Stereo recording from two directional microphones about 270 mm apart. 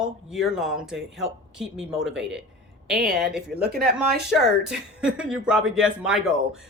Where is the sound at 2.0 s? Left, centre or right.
Right.